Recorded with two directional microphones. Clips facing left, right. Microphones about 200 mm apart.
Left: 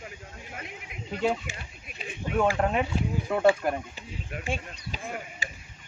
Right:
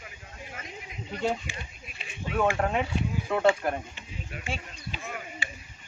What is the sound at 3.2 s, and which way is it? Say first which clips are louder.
Speech: left 2 dB; 10° left (ahead or behind).